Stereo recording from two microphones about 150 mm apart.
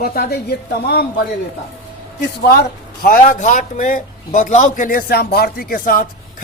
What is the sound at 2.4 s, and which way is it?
Speech, 85° left.